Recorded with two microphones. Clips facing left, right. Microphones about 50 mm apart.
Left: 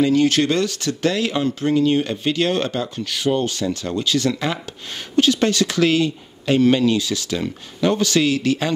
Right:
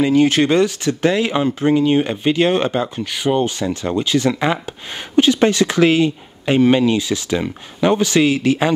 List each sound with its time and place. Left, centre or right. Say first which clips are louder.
0.0 s speech: right 2 dB; right